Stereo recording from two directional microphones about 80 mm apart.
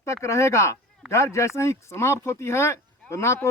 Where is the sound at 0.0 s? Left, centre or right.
Left.